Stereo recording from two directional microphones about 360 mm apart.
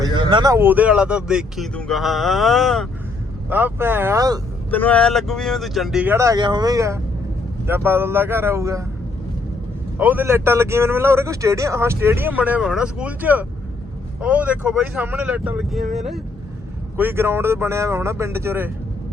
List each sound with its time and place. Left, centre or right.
0.0 s a man's voice: centre
4.7 s a man's voice: centre
10.0 s a man's voice: centre